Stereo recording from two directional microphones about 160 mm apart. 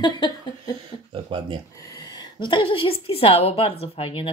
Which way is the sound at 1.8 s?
20° left (ahead or behind).